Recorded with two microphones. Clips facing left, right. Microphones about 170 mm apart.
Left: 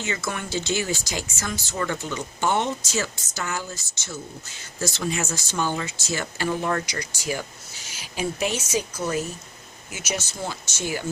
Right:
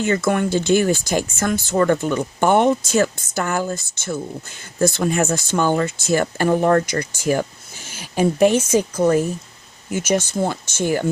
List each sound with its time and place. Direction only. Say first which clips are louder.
0.0 s speech: right 11 dB; 55° right (ahead or behind)